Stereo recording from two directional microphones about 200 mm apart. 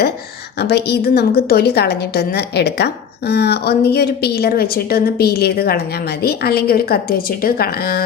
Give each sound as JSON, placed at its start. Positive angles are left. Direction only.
{"t": 0.6, "sound": "a woman's voice", "side_deg": 55}